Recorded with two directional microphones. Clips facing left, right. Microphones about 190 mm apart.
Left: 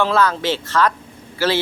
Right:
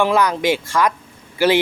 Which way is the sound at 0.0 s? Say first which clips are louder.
Right 1 dB; 15° right (ahead or behind).